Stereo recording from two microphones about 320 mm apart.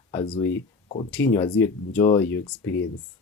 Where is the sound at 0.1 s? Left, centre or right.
Centre.